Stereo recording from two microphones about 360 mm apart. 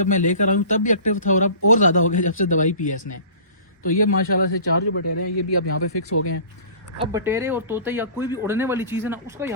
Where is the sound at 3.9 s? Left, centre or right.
Left.